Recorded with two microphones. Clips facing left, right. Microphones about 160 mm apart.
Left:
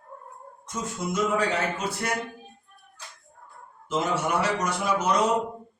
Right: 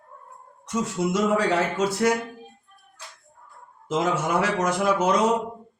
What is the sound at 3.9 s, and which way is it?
Speech, 90° right.